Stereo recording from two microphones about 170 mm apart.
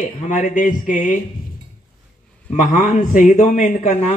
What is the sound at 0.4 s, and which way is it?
Speech, 50° left (ahead or behind).